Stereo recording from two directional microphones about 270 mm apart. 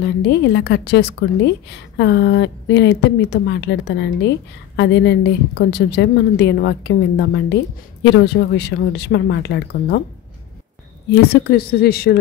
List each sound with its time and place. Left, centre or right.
0.0 s a woman's voice: left
11.1 s a woman's voice: left